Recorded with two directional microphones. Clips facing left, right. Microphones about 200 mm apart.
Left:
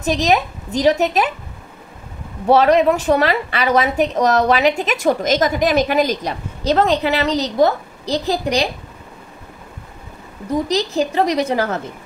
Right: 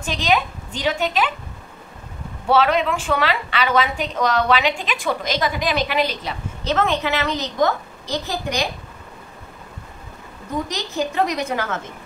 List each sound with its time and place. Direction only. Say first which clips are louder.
0.0 s a woman's voice: left 4 dB; 40° left (ahead or behind)
2.4 s a woman's voice: left 6 dB; 40° left (ahead or behind)
10.5 s a woman's voice: left 7 dB; 35° left (ahead or behind)